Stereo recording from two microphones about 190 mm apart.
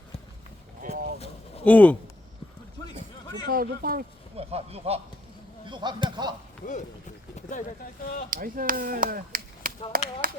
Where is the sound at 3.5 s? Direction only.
50° right (ahead or behind).